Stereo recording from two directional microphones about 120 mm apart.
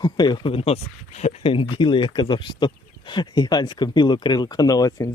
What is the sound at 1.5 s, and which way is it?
Speech, 45° left (ahead or behind).